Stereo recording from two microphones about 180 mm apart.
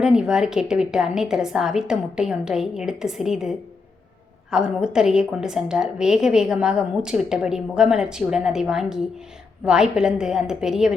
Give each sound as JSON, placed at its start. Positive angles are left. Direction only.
{"t": 0.0, "sound": "a woman's voice", "side_deg": -5}
{"t": 4.5, "sound": "a woman's voice", "side_deg": -5}